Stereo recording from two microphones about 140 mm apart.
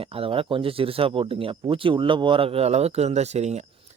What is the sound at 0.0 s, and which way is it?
Speech, 40° right (ahead or behind).